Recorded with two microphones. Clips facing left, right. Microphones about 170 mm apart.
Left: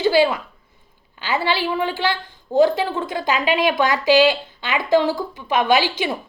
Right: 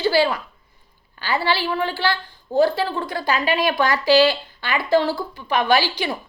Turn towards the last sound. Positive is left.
turn(degrees=20)  # may be behind; listen again after turning